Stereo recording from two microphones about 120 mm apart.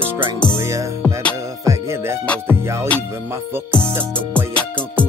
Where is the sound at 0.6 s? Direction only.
25° right (ahead or behind).